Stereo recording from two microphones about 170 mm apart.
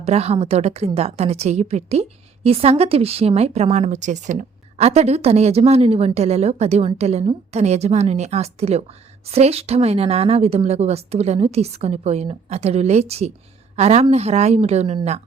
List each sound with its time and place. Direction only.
0.0 s a woman's voice: 40° right (ahead or behind)